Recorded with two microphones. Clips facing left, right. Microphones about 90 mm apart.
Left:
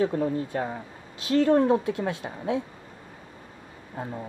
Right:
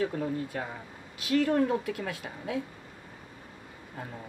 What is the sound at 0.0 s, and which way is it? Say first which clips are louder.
Speech: left 5 dB; 35° left (ahead or behind).